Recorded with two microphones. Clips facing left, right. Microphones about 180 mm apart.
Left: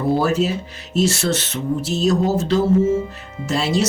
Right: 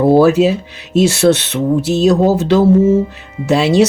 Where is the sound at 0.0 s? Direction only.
70° right (ahead or behind).